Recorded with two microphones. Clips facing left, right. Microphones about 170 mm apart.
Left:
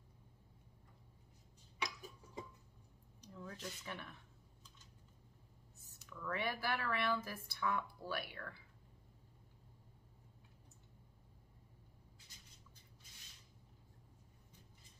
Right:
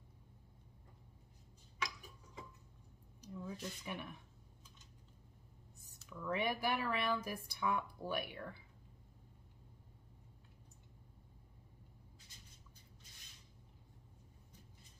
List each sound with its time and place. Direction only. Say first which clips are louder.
3.2 s speech: right 4 dB; 10° right (ahead or behind)
6.0 s speech: right 3 dB; 15° right (ahead or behind)